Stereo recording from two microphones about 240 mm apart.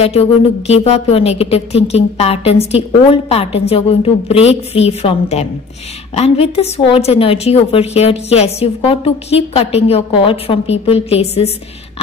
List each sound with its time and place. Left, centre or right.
0.0 s a woman's voice: left